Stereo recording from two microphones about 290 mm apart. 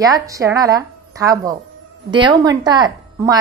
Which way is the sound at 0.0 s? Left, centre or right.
Centre.